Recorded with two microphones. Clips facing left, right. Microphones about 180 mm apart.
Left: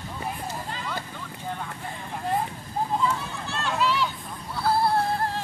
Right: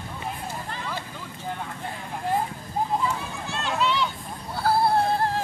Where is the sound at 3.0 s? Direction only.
15° right (ahead or behind).